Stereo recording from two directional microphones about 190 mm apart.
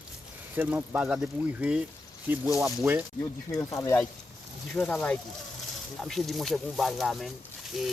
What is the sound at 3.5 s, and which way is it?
Speech, 15° left (ahead or behind).